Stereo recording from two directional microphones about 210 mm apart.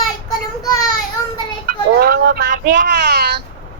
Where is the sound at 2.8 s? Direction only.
55° right (ahead or behind).